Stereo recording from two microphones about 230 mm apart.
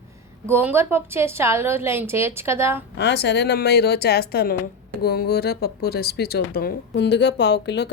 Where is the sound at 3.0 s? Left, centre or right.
Left.